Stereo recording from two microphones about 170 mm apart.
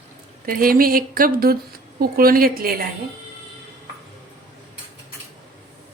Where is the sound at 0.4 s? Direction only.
60° right (ahead or behind).